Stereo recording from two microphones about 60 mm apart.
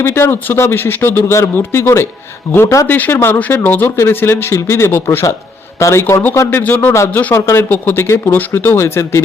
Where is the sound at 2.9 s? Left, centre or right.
Left.